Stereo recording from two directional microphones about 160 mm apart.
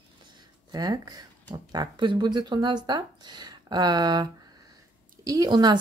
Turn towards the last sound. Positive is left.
turn(degrees=-25)  # may be behind; listen again after turning